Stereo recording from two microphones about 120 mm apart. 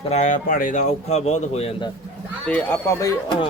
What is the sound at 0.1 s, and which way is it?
Speech, 80° left.